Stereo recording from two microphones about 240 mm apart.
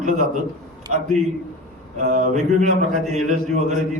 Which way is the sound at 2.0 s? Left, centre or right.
Right.